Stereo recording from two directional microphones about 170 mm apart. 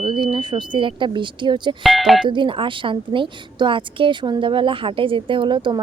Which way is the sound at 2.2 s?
30° right (ahead or behind).